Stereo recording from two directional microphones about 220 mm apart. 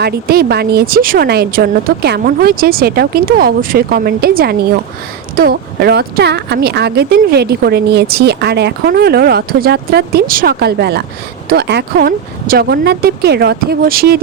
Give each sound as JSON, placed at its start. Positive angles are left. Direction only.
{"t": 0.0, "sound": "speech", "side_deg": -45}